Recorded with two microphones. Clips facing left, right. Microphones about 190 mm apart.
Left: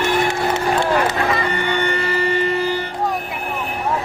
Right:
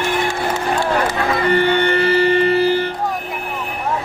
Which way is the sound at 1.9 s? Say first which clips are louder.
Right 5 dB; 70° right (ahead or behind).